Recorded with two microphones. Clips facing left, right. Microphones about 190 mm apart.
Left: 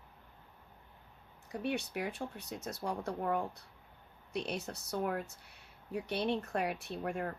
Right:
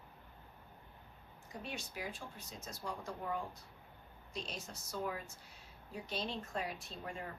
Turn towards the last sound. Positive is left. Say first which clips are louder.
# left 8 dB
turn(degrees=60)  # may be behind; listen again after turning